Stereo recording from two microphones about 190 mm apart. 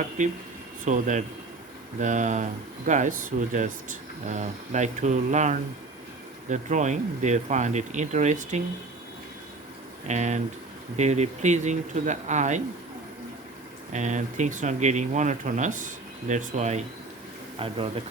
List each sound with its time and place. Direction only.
0.2 s speech: 40° right (ahead or behind)
10.1 s speech: 35° right (ahead or behind)
13.9 s speech: 40° right (ahead or behind)